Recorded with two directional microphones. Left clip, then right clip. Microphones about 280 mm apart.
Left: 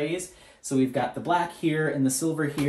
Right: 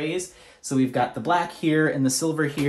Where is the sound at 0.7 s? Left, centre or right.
Right.